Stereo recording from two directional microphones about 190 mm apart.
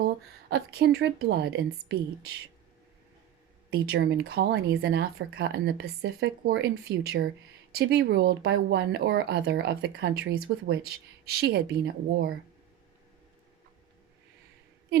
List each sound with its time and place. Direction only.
0.5 s speech: 60° right (ahead or behind)
3.7 s speech: 60° right (ahead or behind)